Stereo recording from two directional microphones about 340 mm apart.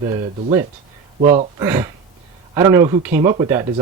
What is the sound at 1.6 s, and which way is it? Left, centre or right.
Speech, centre.